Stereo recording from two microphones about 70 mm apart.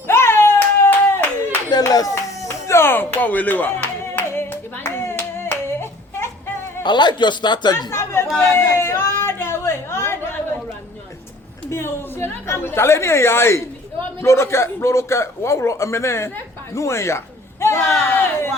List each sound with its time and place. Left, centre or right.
0.1 s hands: left
1.7 s clapping: left
2.6 s clapping: left
6.8 s speech: left
7.9 s chatter: left
8.4 s a sound: left
11.7 s a man's voice: left
17.7 s speech: centre
18.1 s a sound: left